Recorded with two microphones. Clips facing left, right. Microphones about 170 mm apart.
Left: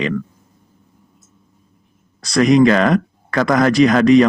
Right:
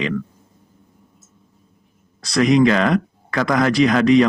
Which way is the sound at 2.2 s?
45° left (ahead or behind).